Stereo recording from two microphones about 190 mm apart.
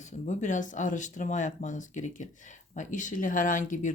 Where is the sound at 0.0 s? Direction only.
40° left (ahead or behind).